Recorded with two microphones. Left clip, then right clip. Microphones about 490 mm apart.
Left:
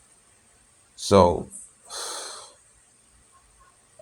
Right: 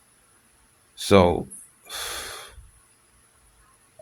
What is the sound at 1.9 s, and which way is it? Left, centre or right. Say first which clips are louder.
Snort: right 2 dB; right.